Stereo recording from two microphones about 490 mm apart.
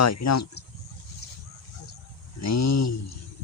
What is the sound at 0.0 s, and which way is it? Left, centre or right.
Speech, left.